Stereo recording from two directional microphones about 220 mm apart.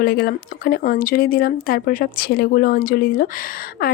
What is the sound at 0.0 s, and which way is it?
A woman's voice, 45° left (ahead or behind).